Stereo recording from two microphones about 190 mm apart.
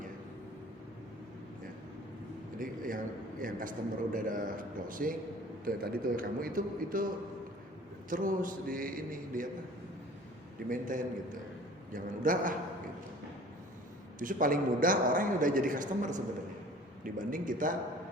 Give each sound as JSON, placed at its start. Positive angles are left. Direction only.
{"t": 2.6, "sound": "a man's voice", "side_deg": -45}
{"t": 8.1, "sound": "a man's voice", "side_deg": -45}
{"t": 10.7, "sound": "a man's voice", "side_deg": -45}
{"t": 14.2, "sound": "a man's voice", "side_deg": -45}